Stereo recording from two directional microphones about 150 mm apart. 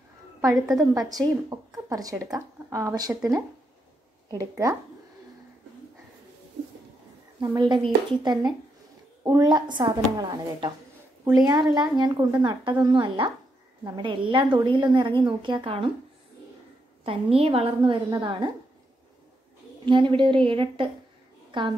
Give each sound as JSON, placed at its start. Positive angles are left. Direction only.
{"t": 0.7, "sound": "a woman's voice", "side_deg": -25}
{"t": 4.3, "sound": "a woman's voice", "side_deg": -20}
{"t": 7.3, "sound": "a woman's voice", "side_deg": -30}
{"t": 11.7, "sound": "a woman's voice", "side_deg": -30}
{"t": 17.0, "sound": "a woman's voice", "side_deg": -40}
{"t": 19.9, "sound": "a woman's voice", "side_deg": -35}